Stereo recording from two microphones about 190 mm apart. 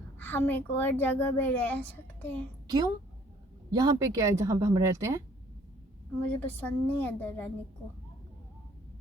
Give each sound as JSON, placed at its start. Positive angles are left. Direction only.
{"t": 0.2, "sound": "a child's voice", "side_deg": 10}
{"t": 2.6, "sound": "a woman's voice", "side_deg": -20}
{"t": 6.4, "sound": "a child's voice", "side_deg": 10}